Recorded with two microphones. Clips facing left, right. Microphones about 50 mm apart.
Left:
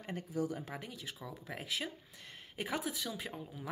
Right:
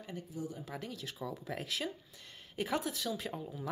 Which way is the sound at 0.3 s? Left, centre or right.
Left.